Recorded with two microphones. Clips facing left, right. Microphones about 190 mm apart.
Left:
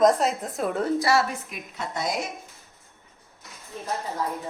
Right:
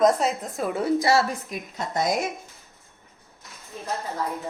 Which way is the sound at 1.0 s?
25° right (ahead or behind).